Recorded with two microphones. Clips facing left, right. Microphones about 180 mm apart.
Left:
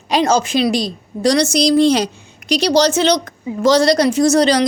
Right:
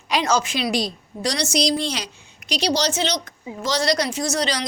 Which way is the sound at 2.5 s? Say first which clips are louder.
Left 8 dB; 70° left (ahead or behind).